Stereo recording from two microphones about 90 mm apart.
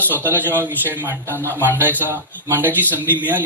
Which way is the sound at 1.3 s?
20° left (ahead or behind).